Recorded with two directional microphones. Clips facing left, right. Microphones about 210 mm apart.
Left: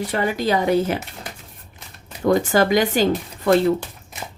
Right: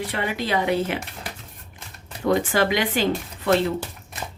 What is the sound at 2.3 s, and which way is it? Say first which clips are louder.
Speech: left 4 dB; 40° left (ahead or behind).